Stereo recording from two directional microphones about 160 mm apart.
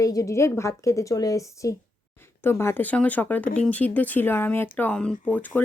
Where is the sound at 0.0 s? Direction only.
20° left (ahead or behind).